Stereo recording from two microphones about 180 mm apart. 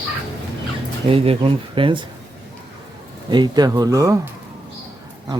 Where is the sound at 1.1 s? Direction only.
30° right (ahead or behind).